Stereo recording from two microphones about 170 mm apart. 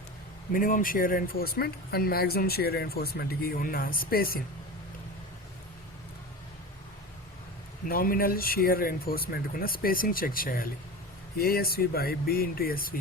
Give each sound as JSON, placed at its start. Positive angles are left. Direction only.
{"t": 0.5, "sound": "speech", "side_deg": 55}
{"t": 7.9, "sound": "speech", "side_deg": 60}